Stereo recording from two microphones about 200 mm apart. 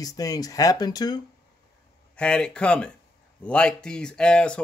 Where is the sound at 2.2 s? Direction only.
5° left (ahead or behind).